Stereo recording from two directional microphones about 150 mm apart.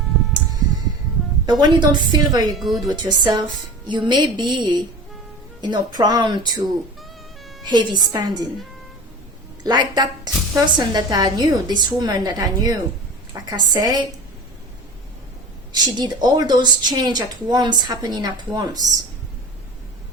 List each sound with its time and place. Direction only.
1.5 s a woman's voice: 30° right (ahead or behind)
2.5 s speech: centre (ahead or behind)
2.9 s a woman's voice: 30° right (ahead or behind)
7.6 s a woman's voice: 30° right (ahead or behind)
9.6 s a woman's voice: 30° right (ahead or behind)
15.7 s a woman's voice: 30° right (ahead or behind)